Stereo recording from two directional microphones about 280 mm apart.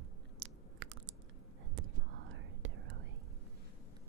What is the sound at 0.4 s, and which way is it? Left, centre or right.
Chewing, right.